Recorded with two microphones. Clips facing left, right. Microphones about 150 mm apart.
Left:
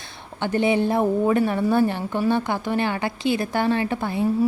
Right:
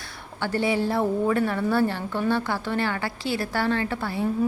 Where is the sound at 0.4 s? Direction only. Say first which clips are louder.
Left 4 dB; 20° left (ahead or behind).